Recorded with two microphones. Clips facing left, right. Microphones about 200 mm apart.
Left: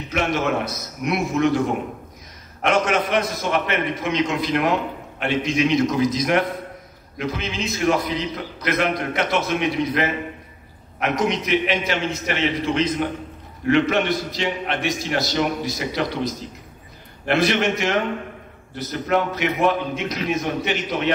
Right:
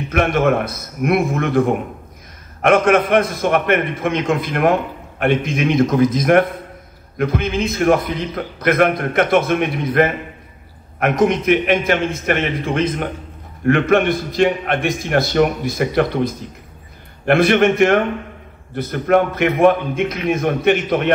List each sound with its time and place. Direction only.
0.1 s a man's voice: 55° right (ahead or behind)